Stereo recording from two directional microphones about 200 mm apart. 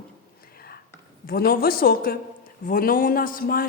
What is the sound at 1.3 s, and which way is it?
A woman's voice, 50° left (ahead or behind).